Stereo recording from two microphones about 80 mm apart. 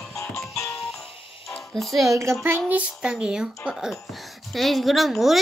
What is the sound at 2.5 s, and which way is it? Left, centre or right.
A child's voice, centre.